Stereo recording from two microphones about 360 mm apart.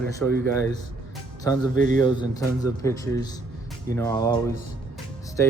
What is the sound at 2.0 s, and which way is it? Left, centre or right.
Speech, centre.